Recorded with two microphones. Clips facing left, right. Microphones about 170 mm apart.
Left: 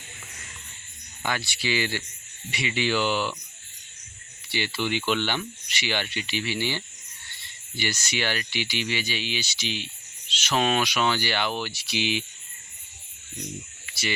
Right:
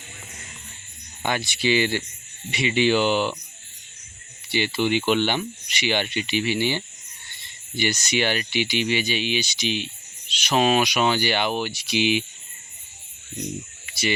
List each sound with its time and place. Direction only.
1.2 s speech: 20° right (ahead or behind)
4.4 s speech: 20° right (ahead or behind)
13.8 s a sound: 20° right (ahead or behind)